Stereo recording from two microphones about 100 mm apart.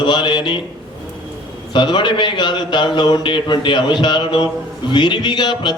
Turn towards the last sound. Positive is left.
turn(degrees=50)  # may be behind; listen again after turning